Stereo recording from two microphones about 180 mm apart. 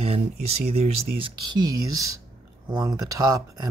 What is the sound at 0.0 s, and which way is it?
Speech, 35° right (ahead or behind).